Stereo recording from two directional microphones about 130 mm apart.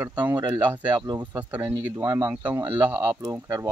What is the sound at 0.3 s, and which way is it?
Speech, 30° right (ahead or behind).